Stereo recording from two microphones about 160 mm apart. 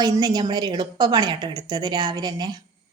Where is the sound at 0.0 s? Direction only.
25° right (ahead or behind).